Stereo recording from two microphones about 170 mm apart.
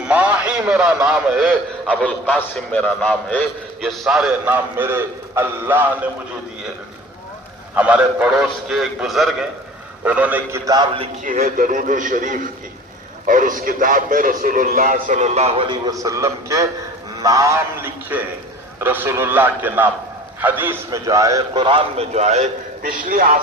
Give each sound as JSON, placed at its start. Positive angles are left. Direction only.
{"t": 0.0, "sound": "a man's voice", "side_deg": -10}
{"t": 7.8, "sound": "a man's voice", "side_deg": -10}
{"t": 10.7, "sound": "a man's voice", "side_deg": -30}
{"t": 11.2, "sound": "a man's voice", "side_deg": -55}